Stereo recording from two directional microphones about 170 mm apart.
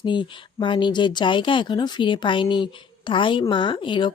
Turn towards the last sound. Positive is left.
turn(degrees=30)  # may be behind; listen again after turning